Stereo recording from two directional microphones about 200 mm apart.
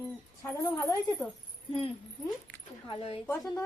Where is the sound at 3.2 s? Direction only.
15° left (ahead or behind).